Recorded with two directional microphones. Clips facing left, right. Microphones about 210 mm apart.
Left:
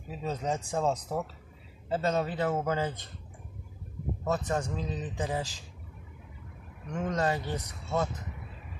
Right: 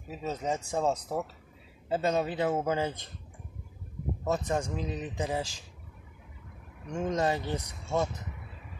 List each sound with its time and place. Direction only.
0.1 s a man's voice: 5° right (ahead or behind)
4.2 s a man's voice: 10° right (ahead or behind)
6.9 s a man's voice: 15° right (ahead or behind)